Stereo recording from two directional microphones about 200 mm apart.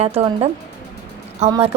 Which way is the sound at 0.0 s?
30° right (ahead or behind).